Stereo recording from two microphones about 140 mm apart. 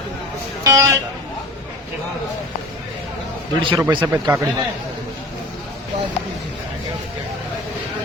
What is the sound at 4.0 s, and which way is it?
Speech, 20° right (ahead or behind).